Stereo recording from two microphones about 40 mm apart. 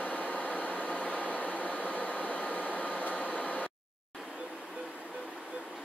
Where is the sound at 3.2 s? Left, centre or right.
Left.